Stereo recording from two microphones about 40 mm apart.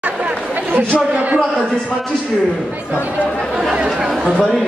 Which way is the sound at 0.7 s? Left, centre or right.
Right.